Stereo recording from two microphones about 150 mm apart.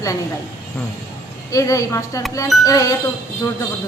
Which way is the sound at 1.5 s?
20° left (ahead or behind).